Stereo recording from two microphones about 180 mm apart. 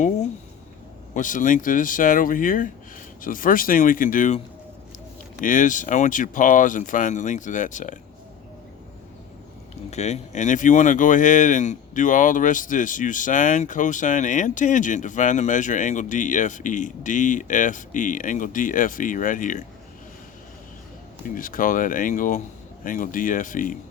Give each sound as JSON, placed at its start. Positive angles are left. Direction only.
{"t": 1.1, "sound": "speech", "side_deg": 45}
{"t": 5.4, "sound": "speech", "side_deg": 45}
{"t": 9.9, "sound": "speech", "side_deg": 40}
{"t": 21.2, "sound": "speech", "side_deg": 50}